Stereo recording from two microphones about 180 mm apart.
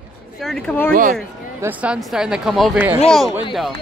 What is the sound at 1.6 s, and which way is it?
Speech, 10° right (ahead or behind).